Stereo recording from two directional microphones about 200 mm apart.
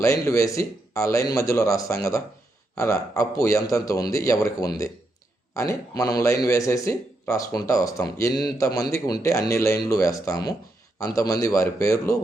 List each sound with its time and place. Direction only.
0.0 s speech: 15° left (ahead or behind)